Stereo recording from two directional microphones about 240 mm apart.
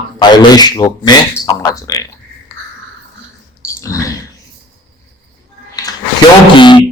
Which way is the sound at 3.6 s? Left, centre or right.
Centre.